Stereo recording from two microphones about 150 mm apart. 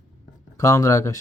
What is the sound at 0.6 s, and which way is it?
Speech, 20° left (ahead or behind).